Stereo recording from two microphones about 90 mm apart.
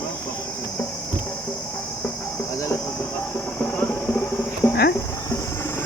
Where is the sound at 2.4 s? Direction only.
35° left (ahead or behind).